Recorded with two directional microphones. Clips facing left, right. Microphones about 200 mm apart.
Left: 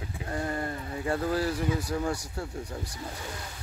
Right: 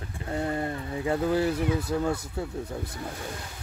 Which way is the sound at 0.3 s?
20° right (ahead or behind).